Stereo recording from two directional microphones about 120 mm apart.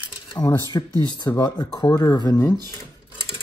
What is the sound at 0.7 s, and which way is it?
Speech, 35° left (ahead or behind).